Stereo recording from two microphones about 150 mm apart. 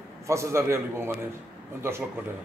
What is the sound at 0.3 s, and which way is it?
A man's voice, 20° right (ahead or behind).